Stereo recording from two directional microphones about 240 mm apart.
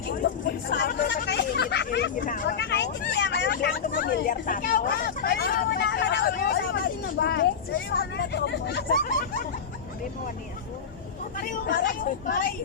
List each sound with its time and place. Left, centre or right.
0.4 s speech: left
11.3 s speech: left